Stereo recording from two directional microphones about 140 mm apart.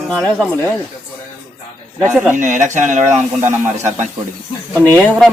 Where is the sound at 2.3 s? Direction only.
65° right (ahead or behind).